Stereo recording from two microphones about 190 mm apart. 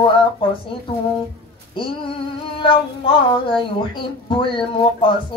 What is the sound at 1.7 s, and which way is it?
Speech, 30° left (ahead or behind).